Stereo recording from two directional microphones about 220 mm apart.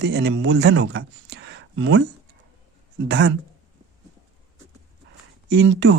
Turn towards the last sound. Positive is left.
turn(degrees=-55)  # may be behind; listen again after turning